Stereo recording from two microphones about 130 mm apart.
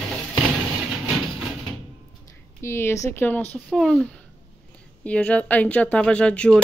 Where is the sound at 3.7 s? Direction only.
5° left (ahead or behind).